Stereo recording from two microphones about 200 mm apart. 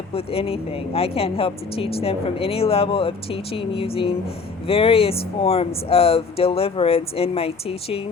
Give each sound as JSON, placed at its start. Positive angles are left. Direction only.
{"t": 0.1, "sound": "speech", "side_deg": 30}